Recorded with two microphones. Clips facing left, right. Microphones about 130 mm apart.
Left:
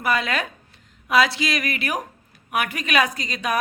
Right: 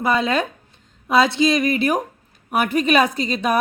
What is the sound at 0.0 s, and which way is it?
A woman's voice, 25° right (ahead or behind).